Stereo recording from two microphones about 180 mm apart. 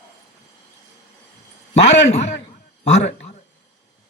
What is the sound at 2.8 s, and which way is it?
Speech, 40° left (ahead or behind).